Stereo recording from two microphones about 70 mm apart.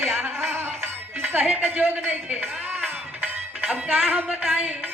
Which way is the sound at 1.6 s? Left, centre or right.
Right.